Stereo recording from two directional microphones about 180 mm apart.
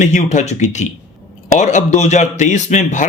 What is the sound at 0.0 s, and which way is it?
A man's voice, 40° left (ahead or behind).